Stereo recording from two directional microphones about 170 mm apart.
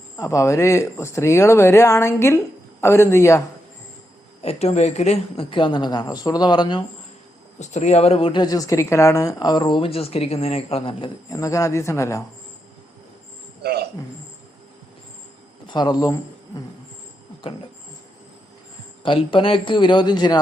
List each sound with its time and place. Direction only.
0.2 s speech: 20° left (ahead or behind)
4.4 s a woman's voice: 40° left (ahead or behind)
7.6 s a woman's voice: 45° left (ahead or behind); by 12.2 s 15° left (ahead or behind)
13.6 s a sound: 70° right (ahead or behind)
15.6 s speech: 25° left (ahead or behind)
19.0 s a woman's voice: 30° left (ahead or behind)